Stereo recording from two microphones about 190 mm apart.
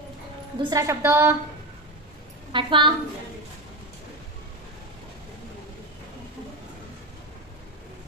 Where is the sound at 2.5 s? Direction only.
25° right (ahead or behind).